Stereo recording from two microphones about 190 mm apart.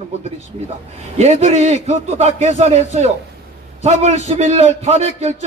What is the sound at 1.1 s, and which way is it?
A man's voice, 35° right (ahead or behind).